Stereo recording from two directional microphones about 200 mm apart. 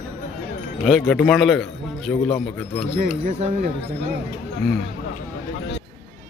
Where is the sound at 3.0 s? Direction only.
50° right (ahead or behind).